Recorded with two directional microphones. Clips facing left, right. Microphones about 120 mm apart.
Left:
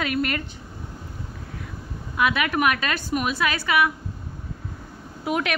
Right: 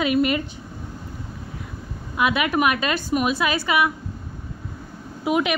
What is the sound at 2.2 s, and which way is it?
A woman's voice, 20° right (ahead or behind).